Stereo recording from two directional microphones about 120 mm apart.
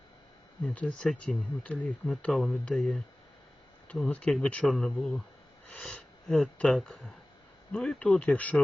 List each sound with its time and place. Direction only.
0.6 s speech: 10° left (ahead or behind)
4.1 s speech: 5° left (ahead or behind)